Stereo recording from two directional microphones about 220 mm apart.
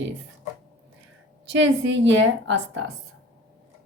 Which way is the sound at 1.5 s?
55° right (ahead or behind).